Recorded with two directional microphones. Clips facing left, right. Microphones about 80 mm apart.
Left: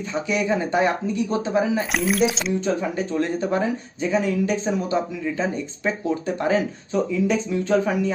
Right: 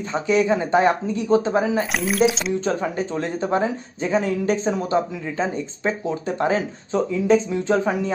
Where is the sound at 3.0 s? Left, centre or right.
Right.